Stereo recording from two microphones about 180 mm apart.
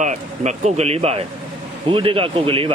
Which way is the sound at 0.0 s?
40° right (ahead or behind).